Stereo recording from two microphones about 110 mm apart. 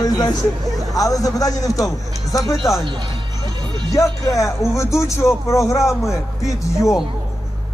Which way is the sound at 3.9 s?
30° left (ahead or behind).